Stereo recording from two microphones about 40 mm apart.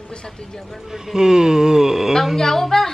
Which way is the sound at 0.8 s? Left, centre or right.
Centre.